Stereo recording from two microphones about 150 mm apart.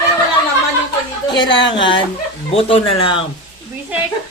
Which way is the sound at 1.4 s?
35° left (ahead or behind).